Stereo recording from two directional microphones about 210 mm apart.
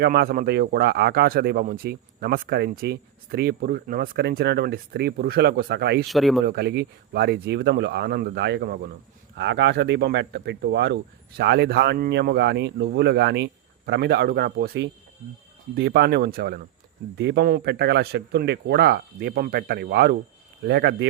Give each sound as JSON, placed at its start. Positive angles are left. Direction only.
{"t": 0.0, "sound": "a man's voice", "side_deg": -45}
{"t": 6.1, "sound": "speech", "side_deg": 0}
{"t": 6.4, "sound": "a man's voice", "side_deg": -50}
{"t": 9.3, "sound": "a man's voice", "side_deg": -55}